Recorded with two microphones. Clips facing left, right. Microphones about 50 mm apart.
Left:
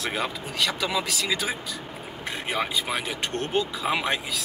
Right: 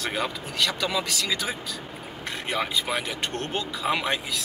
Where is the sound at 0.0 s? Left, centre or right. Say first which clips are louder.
Even; centre.